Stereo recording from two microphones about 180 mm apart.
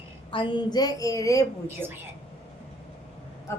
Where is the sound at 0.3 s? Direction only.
25° left (ahead or behind).